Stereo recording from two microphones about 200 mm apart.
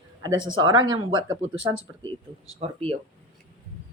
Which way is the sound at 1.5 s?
75° right (ahead or behind).